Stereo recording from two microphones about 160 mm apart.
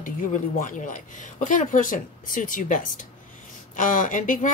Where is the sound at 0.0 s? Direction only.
55° left (ahead or behind).